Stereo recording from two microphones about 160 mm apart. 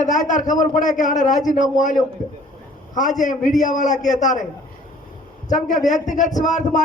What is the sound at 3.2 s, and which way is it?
A man's voice, 55° left (ahead or behind).